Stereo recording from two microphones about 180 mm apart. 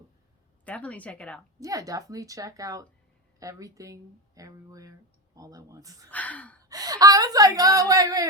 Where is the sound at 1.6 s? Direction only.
20° right (ahead or behind).